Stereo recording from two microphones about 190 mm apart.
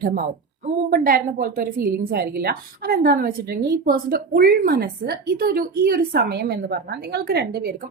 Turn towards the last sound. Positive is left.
turn(degrees=-55)  # may be behind; listen again after turning